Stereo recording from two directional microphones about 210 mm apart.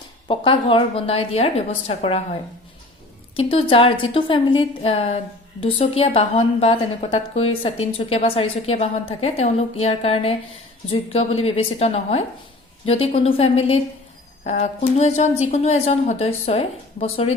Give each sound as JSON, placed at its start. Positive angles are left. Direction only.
{"t": 0.3, "sound": "a woman's voice", "side_deg": 25}